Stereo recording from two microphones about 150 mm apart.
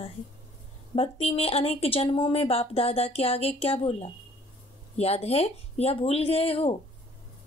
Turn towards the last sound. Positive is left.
turn(degrees=40)  # may be behind; listen again after turning